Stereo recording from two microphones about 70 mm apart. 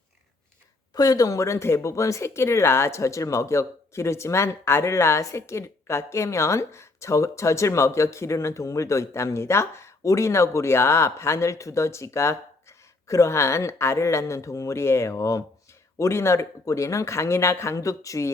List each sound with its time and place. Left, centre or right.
0.9 s speech: left